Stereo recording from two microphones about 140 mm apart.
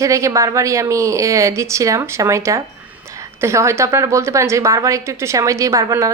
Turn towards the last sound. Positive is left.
turn(degrees=-25)  # may be behind; listen again after turning